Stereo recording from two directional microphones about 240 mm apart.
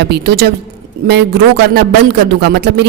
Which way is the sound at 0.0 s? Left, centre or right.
Right.